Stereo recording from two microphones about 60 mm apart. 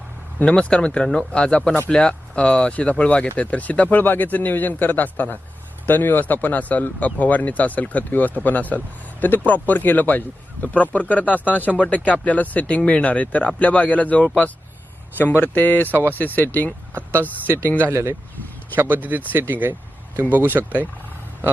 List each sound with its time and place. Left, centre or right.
0.4 s speech: centre
15.4 s speech: left
16.9 s speech: right
17.2 s speech: left
17.9 s speech: right
18.9 s speech: right